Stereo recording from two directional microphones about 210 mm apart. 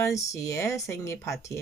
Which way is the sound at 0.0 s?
15° left (ahead or behind).